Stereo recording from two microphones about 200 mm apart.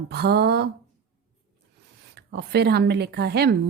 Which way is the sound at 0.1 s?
55° right (ahead or behind).